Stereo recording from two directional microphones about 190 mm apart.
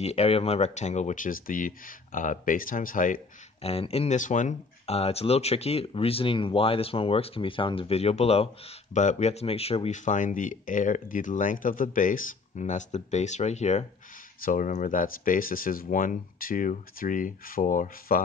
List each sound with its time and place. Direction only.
0.0 s speech: 35° left (ahead or behind)
3.6 s speech: 30° left (ahead or behind)